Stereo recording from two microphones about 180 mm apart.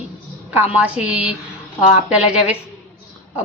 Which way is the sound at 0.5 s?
5° right (ahead or behind).